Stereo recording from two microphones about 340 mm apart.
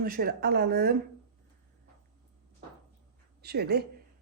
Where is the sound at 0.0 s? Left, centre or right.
Right.